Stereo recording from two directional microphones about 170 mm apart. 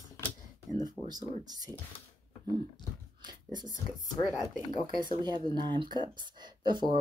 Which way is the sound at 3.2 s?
25° right (ahead or behind).